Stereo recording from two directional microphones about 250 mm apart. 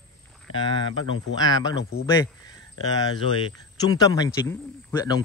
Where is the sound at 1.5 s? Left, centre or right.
Centre.